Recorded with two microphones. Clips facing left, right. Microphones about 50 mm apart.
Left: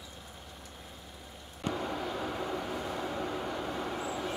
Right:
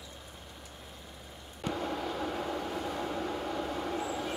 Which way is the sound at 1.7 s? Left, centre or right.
Centre.